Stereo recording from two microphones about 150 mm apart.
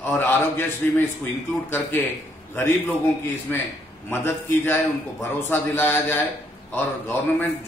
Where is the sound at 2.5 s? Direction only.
15° left (ahead or behind).